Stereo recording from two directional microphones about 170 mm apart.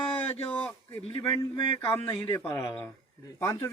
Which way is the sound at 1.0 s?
30° left (ahead or behind).